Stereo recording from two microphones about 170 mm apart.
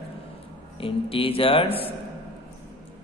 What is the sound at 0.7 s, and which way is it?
A man's voice, 35° left (ahead or behind).